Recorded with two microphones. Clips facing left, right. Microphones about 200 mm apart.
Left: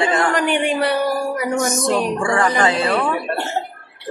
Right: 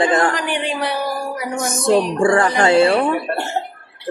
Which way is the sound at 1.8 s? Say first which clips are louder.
Right 4 dB; 30° right (ahead or behind).